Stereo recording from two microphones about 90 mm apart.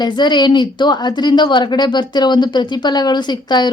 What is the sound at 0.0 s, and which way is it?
A woman's voice, 55° left (ahead or behind).